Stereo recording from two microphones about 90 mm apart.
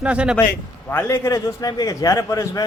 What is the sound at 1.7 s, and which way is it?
Speech, 45° left (ahead or behind).